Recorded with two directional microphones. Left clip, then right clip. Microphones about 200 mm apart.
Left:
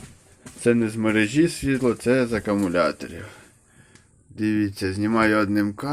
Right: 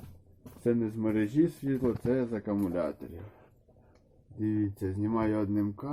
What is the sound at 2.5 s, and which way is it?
Speech, 15° left (ahead or behind).